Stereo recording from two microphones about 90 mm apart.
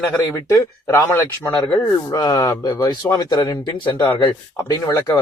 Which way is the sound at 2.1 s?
50° left (ahead or behind).